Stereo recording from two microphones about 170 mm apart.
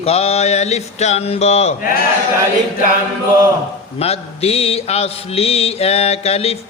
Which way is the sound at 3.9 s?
35° left (ahead or behind).